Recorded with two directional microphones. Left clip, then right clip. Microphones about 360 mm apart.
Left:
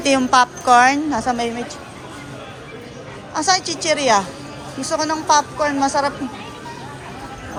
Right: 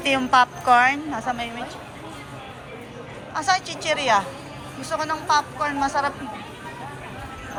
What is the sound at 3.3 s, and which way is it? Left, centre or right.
A woman's voice, centre.